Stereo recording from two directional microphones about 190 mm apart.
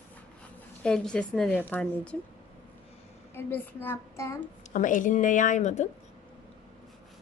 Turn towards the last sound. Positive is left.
turn(degrees=40)  # may be behind; listen again after turning